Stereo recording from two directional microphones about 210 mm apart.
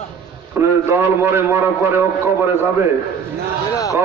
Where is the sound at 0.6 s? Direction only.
10° right (ahead or behind).